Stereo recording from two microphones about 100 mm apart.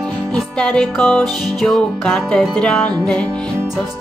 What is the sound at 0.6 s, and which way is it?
Music, 10° left (ahead or behind).